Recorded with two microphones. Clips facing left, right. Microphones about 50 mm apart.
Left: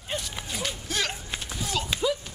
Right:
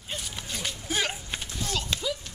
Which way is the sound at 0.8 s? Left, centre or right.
Centre.